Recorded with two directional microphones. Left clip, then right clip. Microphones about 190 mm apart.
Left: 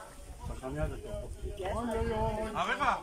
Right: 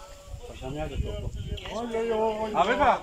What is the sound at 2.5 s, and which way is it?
Speech, 35° right (ahead or behind).